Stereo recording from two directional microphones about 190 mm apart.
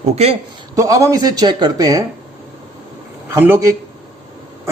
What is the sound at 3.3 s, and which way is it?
Speech, 10° right (ahead or behind).